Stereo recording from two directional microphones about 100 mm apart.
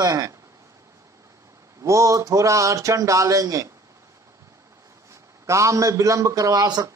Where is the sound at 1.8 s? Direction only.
30° right (ahead or behind).